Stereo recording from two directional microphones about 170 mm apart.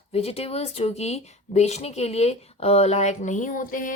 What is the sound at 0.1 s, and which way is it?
Speech, 35° left (ahead or behind).